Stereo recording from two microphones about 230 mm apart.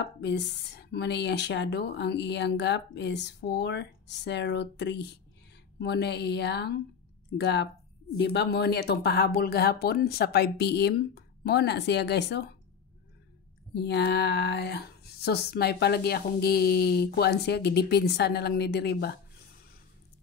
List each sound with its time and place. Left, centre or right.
0.0 s speech: left
13.7 s speech: left